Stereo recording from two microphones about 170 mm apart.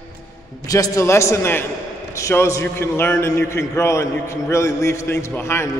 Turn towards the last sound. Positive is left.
turn(degrees=15)  # may be behind; listen again after turning